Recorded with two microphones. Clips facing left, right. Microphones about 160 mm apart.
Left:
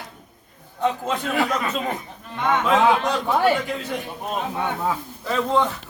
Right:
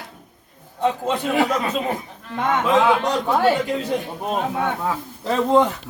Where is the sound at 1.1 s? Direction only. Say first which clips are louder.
Right 3 dB; 15° right (ahead or behind).